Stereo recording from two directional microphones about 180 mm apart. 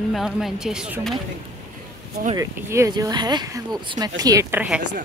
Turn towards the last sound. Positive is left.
turn(degrees=-10)  # may be behind; listen again after turning